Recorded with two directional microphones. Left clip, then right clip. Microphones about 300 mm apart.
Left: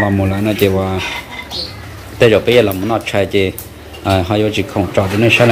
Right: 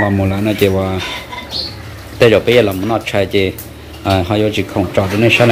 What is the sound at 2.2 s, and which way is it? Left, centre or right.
Speech, centre.